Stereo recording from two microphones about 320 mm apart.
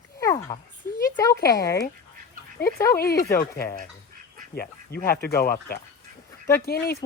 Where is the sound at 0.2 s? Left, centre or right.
Centre.